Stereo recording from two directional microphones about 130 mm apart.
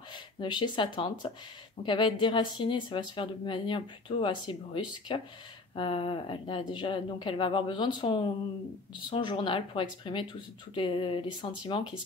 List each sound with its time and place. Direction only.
0.1 s speech: 35° left (ahead or behind)